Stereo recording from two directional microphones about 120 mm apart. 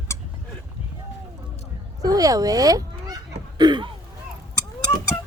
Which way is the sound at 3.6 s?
40° right (ahead or behind).